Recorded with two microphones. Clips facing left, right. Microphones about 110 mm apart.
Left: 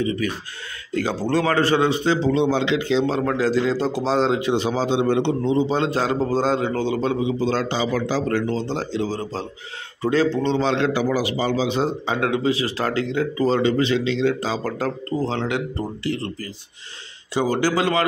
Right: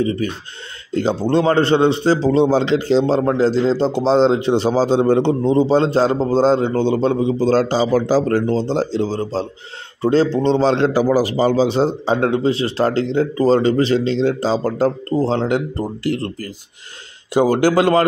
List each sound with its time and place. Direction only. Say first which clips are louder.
0.0 s speech: right 3 dB; 35° right (ahead or behind)
7.2 s speech: right 6 dB; 40° right (ahead or behind)
17.3 s speech: right 6 dB; 50° right (ahead or behind)